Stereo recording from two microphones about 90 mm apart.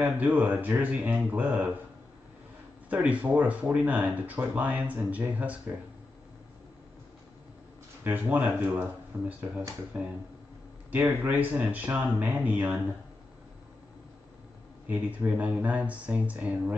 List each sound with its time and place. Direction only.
0.0 s speech: 20° right (ahead or behind)
2.9 s speech: 15° right (ahead or behind)
8.0 s speech: 20° right (ahead or behind)
14.9 s speech: 15° right (ahead or behind)